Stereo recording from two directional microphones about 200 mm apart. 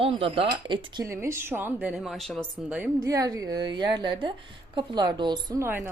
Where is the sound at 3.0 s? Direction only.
15° right (ahead or behind).